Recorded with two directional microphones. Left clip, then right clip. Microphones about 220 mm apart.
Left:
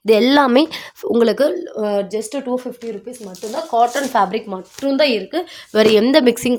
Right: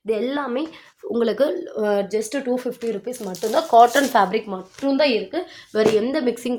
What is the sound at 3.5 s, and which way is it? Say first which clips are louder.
Speech: right 3 dB; 20° right (ahead or behind).